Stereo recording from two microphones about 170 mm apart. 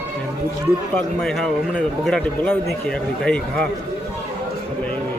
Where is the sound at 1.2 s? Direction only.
5° left (ahead or behind).